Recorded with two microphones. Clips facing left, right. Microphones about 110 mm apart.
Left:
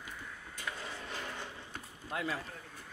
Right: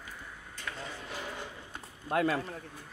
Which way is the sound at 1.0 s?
5° right (ahead or behind).